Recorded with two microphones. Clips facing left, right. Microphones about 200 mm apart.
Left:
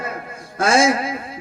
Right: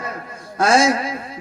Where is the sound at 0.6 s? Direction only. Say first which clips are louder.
Even; 25° left (ahead or behind).